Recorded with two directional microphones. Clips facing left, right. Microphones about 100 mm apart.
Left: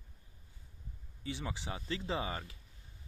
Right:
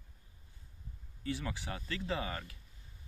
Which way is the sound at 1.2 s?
20° left (ahead or behind).